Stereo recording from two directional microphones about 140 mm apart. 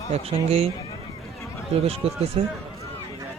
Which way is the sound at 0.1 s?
45° right (ahead or behind).